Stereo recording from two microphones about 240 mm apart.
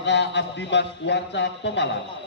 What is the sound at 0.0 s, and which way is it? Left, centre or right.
A man's voice, left.